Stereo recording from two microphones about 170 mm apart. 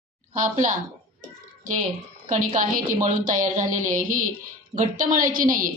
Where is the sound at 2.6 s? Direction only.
50° right (ahead or behind).